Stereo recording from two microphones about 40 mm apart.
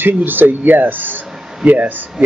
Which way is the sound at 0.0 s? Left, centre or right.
Right.